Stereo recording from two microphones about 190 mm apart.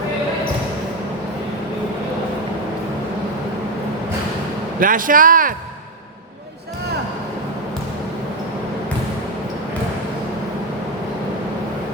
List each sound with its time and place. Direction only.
4.8 s speech: 45° right (ahead or behind)